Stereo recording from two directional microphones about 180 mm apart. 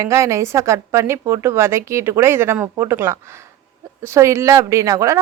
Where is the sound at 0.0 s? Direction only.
15° right (ahead or behind).